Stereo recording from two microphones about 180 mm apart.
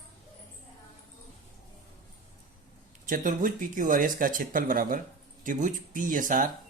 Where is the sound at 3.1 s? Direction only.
50° right (ahead or behind).